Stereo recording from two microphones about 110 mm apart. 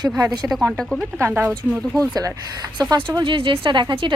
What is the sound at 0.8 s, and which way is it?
Speech, centre (ahead or behind).